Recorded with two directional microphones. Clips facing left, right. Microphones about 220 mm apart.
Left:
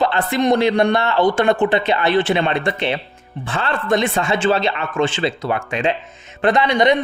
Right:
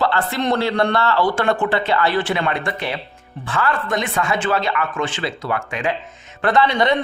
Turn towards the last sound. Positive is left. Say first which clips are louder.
# left 2 dB
turn(degrees=15)  # may be behind; listen again after turning